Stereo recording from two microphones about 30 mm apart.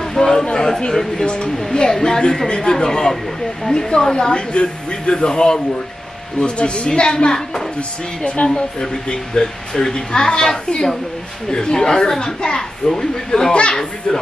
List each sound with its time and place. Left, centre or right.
0.0 s chatter: centre
0.5 s speech: left
1.2 s a woman's voice: left
1.7 s speech: left
4.3 s a woman's voice: left
8.4 s speech: left
9.0 s speech: left
13.5 s a woman's voice: left